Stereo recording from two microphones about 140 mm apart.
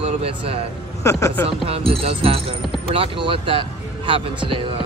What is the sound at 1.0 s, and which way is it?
Speech, 20° left (ahead or behind).